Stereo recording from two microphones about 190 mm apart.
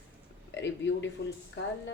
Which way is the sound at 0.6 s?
70° left (ahead or behind).